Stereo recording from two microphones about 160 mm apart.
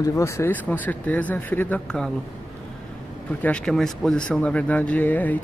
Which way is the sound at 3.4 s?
5° left (ahead or behind).